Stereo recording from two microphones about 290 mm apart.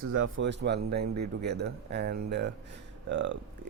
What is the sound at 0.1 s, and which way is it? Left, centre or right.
A man's voice, right.